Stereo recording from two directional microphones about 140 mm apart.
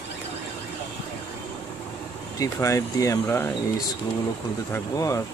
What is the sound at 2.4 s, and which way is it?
Speech, 20° left (ahead or behind).